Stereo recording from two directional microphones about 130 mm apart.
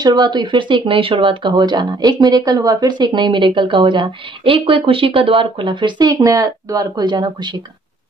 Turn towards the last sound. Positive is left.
turn(degrees=-35)  # may be behind; listen again after turning